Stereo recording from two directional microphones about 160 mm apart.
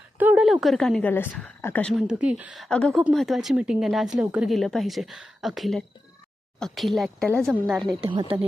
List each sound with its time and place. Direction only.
0.2 s a woman's voice: 10° right (ahead or behind)
8.0 s speech: 30° right (ahead or behind)